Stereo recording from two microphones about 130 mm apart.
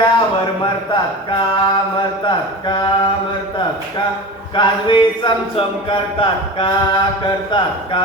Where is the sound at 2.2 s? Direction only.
35° left (ahead or behind).